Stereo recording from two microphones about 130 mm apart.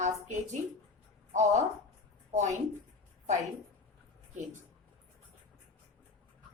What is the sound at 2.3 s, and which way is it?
Speech, 65° right (ahead or behind).